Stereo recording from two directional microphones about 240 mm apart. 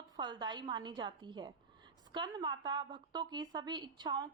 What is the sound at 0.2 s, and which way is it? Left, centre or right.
A woman's voice, centre.